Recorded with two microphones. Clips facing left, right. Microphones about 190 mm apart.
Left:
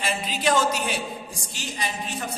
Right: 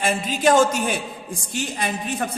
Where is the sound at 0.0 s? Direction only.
50° right (ahead or behind).